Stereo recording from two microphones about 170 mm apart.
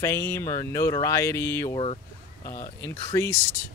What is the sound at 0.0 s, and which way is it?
Speech, 15° left (ahead or behind).